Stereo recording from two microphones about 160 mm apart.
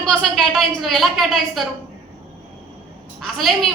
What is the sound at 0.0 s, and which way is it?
A woman's voice, centre (ahead or behind).